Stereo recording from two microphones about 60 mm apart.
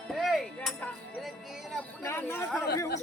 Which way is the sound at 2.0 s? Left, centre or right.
Left.